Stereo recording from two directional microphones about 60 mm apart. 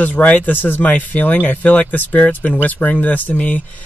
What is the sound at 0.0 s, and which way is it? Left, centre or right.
Speech, left.